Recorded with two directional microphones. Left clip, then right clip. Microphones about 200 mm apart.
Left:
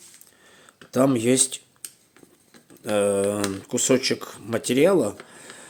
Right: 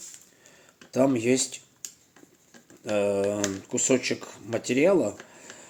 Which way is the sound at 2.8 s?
40° left (ahead or behind).